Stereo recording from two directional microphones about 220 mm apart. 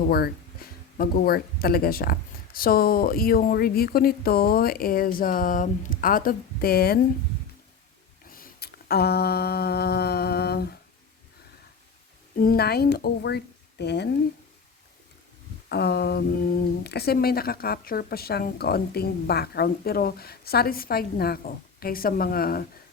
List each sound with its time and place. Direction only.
0.1 s speech: 45° left (ahead or behind)
8.3 s a sound: 45° left (ahead or behind)
12.4 s speech: 45° left (ahead or behind)
15.7 s speech: 50° left (ahead or behind)